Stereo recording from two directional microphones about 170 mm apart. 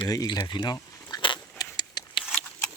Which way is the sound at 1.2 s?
25° left (ahead or behind).